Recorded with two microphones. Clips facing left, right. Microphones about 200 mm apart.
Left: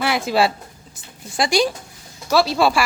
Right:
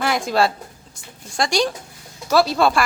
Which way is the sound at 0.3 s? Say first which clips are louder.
Left 1 dB; 5° left (ahead or behind).